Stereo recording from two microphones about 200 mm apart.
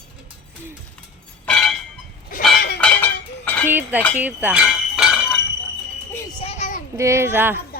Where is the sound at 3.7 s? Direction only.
10° right (ahead or behind).